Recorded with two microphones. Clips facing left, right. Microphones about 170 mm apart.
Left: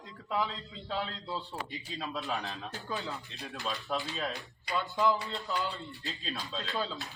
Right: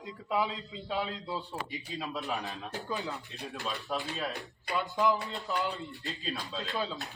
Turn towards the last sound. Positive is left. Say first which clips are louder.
# right 1 dB
turn(degrees=0)  # may be behind; listen again after turning